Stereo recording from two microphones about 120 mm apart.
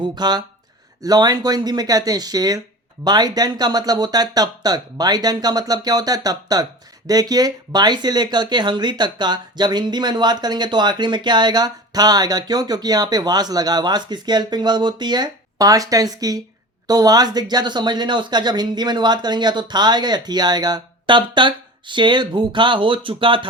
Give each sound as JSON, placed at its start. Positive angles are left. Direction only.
{"t": 0.0, "sound": "speech", "side_deg": -35}